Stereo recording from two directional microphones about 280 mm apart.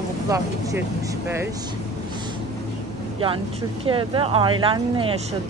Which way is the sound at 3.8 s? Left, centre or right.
Centre.